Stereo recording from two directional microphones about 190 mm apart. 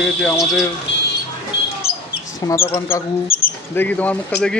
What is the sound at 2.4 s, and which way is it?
Speech, 15° left (ahead or behind).